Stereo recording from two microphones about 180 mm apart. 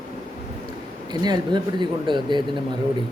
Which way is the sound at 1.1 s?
20° right (ahead or behind).